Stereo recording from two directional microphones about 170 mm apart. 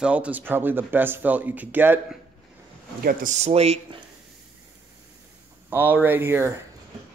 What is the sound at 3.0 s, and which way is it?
Speech, 55° right (ahead or behind).